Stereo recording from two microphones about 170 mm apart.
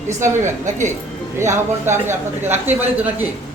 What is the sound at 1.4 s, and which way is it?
Speech, 15° right (ahead or behind).